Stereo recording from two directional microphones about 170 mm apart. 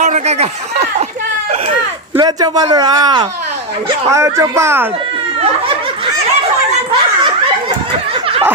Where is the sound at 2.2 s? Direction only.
25° right (ahead or behind).